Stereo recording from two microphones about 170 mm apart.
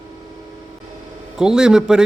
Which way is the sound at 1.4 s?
5° right (ahead or behind).